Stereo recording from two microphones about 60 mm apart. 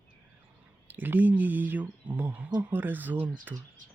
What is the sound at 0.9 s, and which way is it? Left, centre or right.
Speech, right.